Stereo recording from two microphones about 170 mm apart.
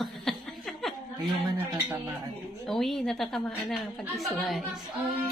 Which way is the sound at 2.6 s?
Centre (ahead or behind).